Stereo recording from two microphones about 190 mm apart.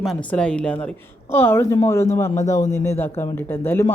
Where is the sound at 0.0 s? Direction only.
5° left (ahead or behind).